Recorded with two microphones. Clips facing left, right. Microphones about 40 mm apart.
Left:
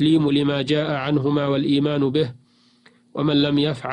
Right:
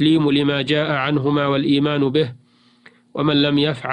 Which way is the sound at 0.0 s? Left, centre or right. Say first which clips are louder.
Right 2 dB; right.